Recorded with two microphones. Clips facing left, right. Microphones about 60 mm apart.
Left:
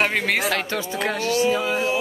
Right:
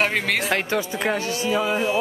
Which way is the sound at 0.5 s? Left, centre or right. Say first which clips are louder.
Right 2 dB; centre.